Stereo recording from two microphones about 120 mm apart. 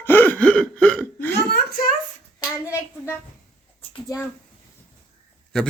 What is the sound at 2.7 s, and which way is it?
Hands, 20° left (ahead or behind).